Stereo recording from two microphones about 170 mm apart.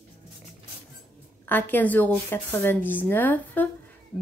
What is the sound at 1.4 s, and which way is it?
A woman's voice, 10° left (ahead or behind).